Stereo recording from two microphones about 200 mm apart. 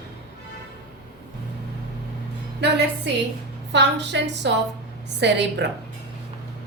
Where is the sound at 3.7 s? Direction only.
60° right (ahead or behind).